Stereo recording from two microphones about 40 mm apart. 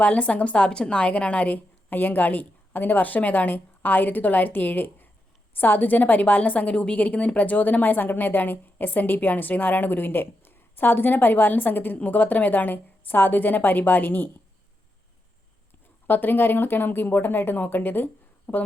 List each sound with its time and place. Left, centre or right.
0.0 s a woman's voice: left
16.0 s a woman's voice: left